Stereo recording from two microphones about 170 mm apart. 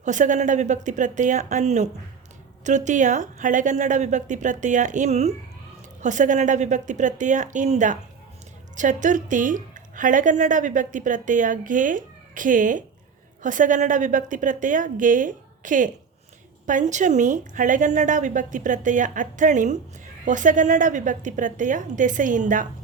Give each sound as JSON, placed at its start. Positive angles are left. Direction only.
{"t": 0.0, "sound": "a woman's voice", "side_deg": -45}